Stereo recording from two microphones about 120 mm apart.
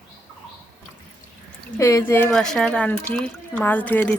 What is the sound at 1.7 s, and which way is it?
Speech, 20° left (ahead or behind).